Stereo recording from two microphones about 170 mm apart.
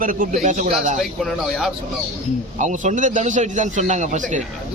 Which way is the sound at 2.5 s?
45° right (ahead or behind).